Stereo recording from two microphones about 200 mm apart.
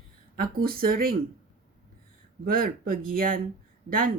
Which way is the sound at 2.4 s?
45° right (ahead or behind).